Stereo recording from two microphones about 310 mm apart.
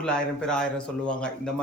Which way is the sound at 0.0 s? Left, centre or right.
Centre.